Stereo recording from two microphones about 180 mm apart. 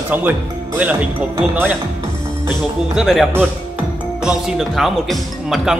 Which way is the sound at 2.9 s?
Centre (ahead or behind).